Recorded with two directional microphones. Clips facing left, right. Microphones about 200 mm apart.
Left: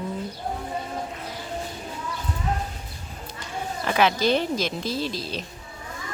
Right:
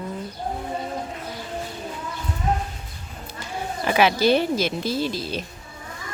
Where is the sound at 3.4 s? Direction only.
10° right (ahead or behind).